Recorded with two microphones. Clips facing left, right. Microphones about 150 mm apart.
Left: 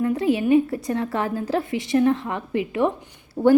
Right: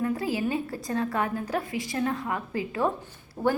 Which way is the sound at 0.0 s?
25° left (ahead or behind).